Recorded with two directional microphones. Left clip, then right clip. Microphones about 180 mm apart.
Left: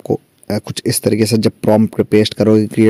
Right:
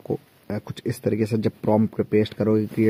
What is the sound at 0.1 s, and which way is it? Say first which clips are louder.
Speech: left 10 dB; 40° left (ahead or behind).